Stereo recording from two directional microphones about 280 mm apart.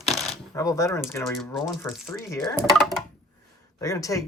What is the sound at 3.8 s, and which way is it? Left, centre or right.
Speech, centre.